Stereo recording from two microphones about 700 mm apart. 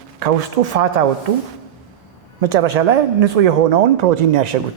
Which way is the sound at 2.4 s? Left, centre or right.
Right.